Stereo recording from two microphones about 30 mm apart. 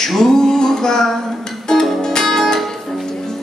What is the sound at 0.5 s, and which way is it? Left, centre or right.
Music, left.